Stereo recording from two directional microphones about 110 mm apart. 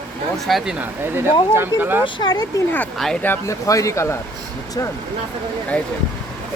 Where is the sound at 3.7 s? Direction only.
30° left (ahead or behind).